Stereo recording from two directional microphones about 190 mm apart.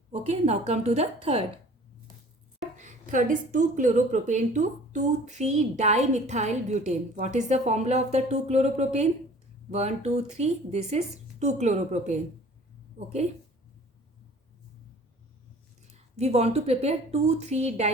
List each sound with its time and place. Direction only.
0.1 s speech: 35° right (ahead or behind)
2.7 s a woman's voice: 40° right (ahead or behind)
15.9 s speech: 35° right (ahead or behind)